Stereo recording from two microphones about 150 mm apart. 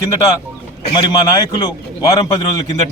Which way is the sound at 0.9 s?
25° left (ahead or behind).